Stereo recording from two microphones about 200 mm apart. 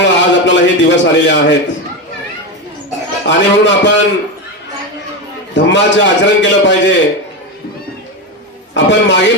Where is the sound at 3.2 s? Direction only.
60° left (ahead or behind).